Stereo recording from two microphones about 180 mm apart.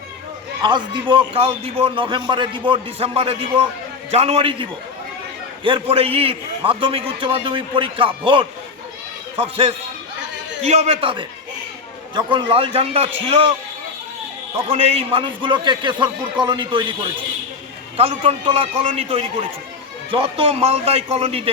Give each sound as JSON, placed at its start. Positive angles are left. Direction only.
{"t": 0.6, "sound": "a man's voice", "side_deg": -25}
{"t": 14.8, "sound": "a man's voice", "side_deg": -35}
{"t": 17.9, "sound": "a man's voice", "side_deg": -35}